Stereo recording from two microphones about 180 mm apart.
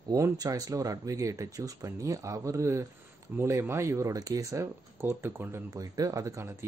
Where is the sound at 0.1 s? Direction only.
20° right (ahead or behind).